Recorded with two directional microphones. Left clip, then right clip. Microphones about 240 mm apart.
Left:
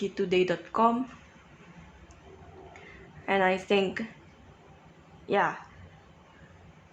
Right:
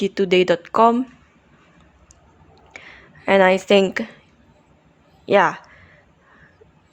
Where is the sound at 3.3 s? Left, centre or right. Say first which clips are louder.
Right 11 dB; right.